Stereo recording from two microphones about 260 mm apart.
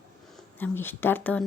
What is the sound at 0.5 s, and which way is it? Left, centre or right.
Speech, centre.